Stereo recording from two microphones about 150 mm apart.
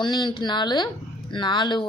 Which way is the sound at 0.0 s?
30° left (ahead or behind).